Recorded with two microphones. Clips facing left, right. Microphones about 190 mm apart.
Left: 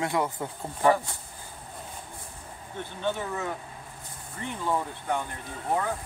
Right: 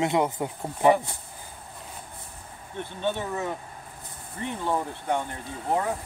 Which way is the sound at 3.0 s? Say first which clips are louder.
Right 2 dB; 20° right (ahead or behind).